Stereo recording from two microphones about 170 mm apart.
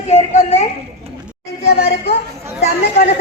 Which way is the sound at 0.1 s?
40° left (ahead or behind).